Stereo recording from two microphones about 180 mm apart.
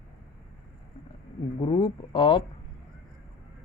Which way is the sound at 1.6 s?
25° left (ahead or behind).